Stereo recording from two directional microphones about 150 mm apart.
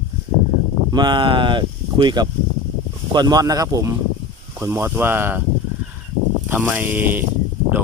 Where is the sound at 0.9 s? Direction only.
30° right (ahead or behind); by 5.4 s 15° right (ahead or behind).